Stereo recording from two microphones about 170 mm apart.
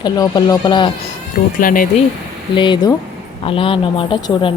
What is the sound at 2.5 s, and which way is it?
Speech, 30° left (ahead or behind).